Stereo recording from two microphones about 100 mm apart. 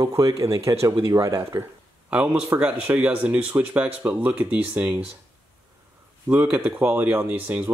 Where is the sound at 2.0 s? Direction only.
10° right (ahead or behind).